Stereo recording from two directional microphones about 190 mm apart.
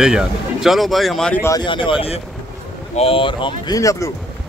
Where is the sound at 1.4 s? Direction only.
20° left (ahead or behind).